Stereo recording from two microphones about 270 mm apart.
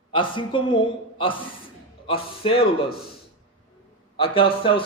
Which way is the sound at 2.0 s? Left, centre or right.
Left.